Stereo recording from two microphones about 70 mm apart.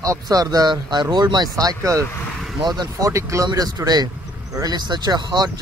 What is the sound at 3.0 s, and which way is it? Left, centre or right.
Speech, right.